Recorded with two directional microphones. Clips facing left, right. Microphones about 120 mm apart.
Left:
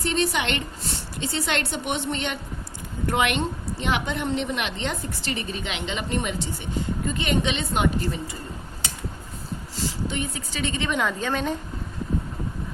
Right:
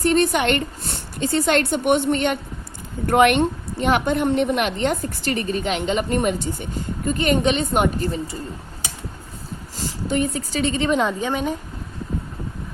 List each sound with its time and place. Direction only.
0.0 s a woman's voice: 50° right (ahead or behind)
9.7 s a woman's voice: 45° right (ahead or behind)
11.2 s a woman's voice: 15° right (ahead or behind)